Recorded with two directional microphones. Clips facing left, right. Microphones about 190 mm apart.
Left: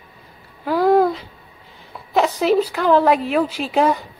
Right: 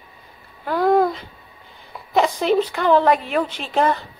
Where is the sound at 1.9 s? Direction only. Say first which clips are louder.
Even; centre (ahead or behind).